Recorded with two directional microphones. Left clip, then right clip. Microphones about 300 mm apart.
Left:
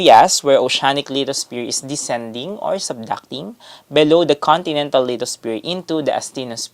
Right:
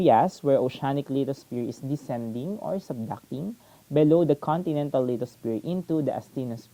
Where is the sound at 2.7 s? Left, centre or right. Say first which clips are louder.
Left 11 dB; centre.